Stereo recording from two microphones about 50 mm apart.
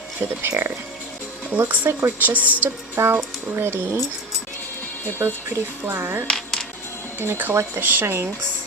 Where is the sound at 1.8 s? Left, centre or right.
Right.